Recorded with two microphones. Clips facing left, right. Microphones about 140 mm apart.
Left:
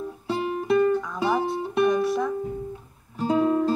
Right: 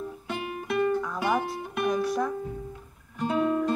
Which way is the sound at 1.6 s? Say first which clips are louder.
Left 8 dB; 30° left (ahead or behind).